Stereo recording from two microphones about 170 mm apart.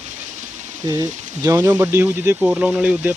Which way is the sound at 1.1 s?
45° right (ahead or behind).